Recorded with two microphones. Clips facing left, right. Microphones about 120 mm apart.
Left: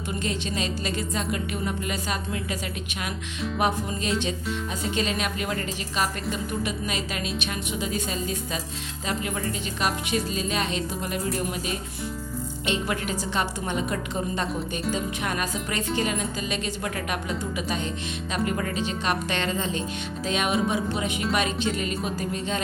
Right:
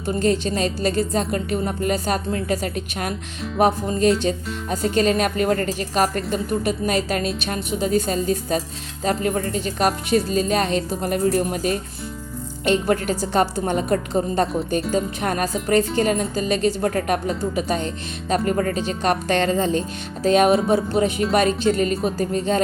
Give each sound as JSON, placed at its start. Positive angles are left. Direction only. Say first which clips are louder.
{"t": 0.1, "sound": "speech", "louder": "right 10 dB", "side_deg": -40}
{"t": 3.6, "sound": "a woman's voice", "louder": "right 9 dB", "side_deg": -40}